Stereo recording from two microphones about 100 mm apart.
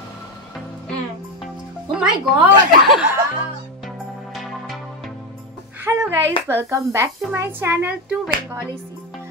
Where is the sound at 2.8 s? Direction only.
Centre (ahead or behind).